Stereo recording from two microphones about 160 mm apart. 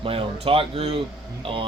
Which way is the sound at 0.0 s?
35° right (ahead or behind).